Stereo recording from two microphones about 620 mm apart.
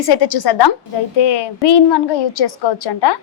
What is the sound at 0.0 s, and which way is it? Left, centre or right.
A woman's voice, left.